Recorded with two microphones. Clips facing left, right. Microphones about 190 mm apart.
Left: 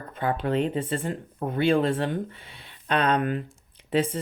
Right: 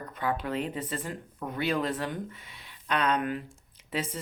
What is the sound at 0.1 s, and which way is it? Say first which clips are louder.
Speech: left 5 dB; 30° left (ahead or behind).